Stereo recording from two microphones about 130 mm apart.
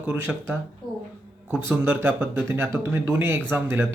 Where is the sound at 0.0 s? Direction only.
15° right (ahead or behind).